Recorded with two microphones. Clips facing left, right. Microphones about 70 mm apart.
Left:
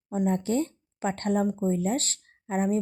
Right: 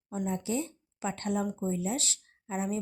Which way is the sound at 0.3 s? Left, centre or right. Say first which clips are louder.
Left 6 dB; left.